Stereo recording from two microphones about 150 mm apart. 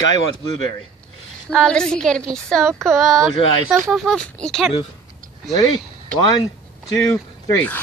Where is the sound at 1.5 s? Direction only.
5° left (ahead or behind).